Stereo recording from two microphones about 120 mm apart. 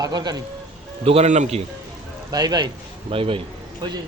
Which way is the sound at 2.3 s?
35° right (ahead or behind).